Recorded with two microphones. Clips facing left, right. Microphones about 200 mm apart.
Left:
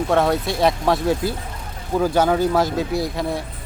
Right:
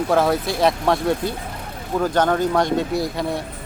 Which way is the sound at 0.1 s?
Centre (ahead or behind).